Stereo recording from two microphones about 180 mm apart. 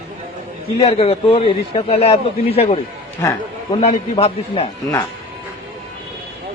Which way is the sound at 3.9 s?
35° left (ahead or behind).